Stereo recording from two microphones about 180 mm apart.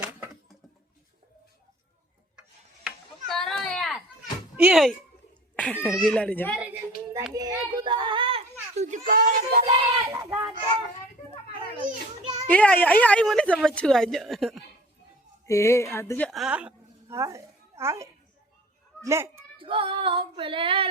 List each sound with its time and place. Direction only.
2.8 s chop: centre (ahead or behind)
4.5 s a child's voice: 5° right (ahead or behind)
6.6 s a sound: 10° right (ahead or behind)
7.3 s children playing: 20° right (ahead or behind); by 9.0 s 40° right (ahead or behind)
9.0 s speech: 55° right (ahead or behind)
10.1 s a child's voice: 15° right (ahead or behind)
12.2 s children playing: 20° right (ahead or behind)
12.5 s a woman's voice: 5° left (ahead or behind)
15.4 s a woman's voice: 15° left (ahead or behind); by 19.5 s 15° right (ahead or behind)
19.5 s female singing: 30° right (ahead or behind)